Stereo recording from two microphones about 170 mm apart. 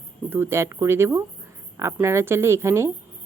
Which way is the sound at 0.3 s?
15° right (ahead or behind).